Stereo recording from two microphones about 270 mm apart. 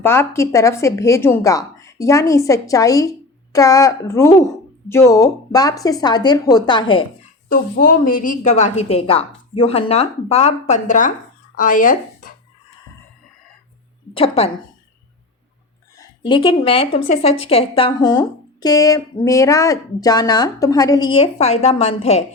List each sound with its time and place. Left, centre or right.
0.0 s a woman's voice: centre
7.5 s a woman's voice: left
14.1 s a woman's voice: left
16.2 s a woman's voice: centre